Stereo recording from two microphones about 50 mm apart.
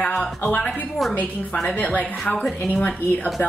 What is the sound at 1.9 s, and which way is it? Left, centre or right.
Speech, left.